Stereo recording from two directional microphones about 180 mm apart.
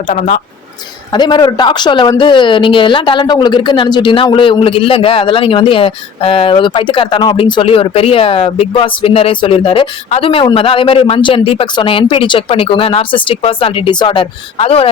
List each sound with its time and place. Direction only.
0.1 s speech: 40° left (ahead or behind)
1.1 s speech: 25° left (ahead or behind)